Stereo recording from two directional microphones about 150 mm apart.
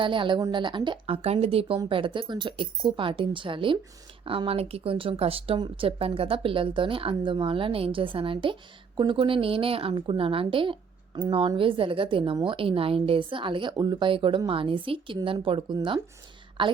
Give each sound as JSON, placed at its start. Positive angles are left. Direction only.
{"t": 0.0, "sound": "a woman's voice", "side_deg": -35}